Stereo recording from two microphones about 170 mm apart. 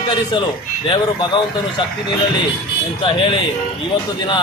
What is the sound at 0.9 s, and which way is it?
Speech, 25° left (ahead or behind).